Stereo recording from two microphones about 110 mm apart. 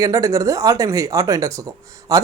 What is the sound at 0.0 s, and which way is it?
Speech, 30° right (ahead or behind).